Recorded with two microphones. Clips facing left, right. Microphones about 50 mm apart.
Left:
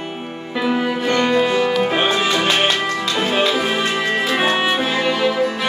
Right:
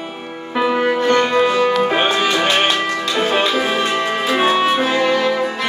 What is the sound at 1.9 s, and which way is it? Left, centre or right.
Music, centre.